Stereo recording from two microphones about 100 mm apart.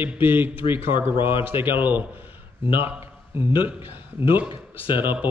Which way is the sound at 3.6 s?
20° right (ahead or behind).